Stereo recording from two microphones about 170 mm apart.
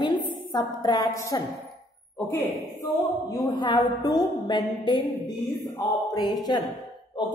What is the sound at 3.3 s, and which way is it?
A woman's voice, 25° left (ahead or behind).